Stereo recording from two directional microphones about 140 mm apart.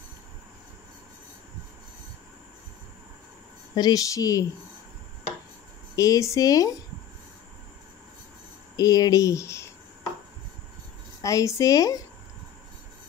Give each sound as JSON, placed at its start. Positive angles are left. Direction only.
{"t": 3.7, "sound": "a woman's voice", "side_deg": 25}
{"t": 5.9, "sound": "a woman's voice", "side_deg": 25}
{"t": 8.7, "sound": "speech", "side_deg": 25}
{"t": 11.2, "sound": "a woman's voice", "side_deg": 20}